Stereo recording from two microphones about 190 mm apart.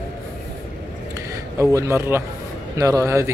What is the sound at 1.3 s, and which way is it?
A man's voice, 15° right (ahead or behind).